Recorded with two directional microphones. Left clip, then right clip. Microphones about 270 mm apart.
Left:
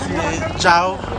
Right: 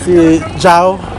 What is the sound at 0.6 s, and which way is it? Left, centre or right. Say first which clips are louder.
Speech: right 5 dB; centre.